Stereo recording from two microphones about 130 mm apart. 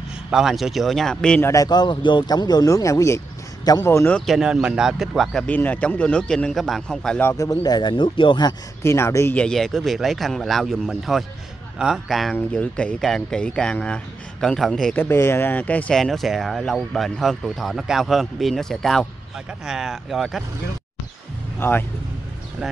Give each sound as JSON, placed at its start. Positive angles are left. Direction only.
{"t": 0.3, "sound": "speech", "side_deg": -5}
{"t": 1.4, "sound": "speech", "side_deg": 25}
{"t": 4.1, "sound": "speech", "side_deg": -5}
{"t": 5.5, "sound": "speech", "side_deg": 10}
{"t": 7.2, "sound": "speech", "side_deg": 25}
{"t": 8.8, "sound": "speech", "side_deg": 20}
{"t": 9.4, "sound": "speech", "side_deg": 5}
{"t": 15.0, "sound": "speech", "side_deg": 20}
{"t": 21.5, "sound": "speech", "side_deg": 15}